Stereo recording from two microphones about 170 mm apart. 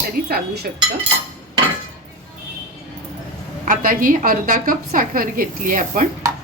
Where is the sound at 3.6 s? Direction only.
50° right (ahead or behind).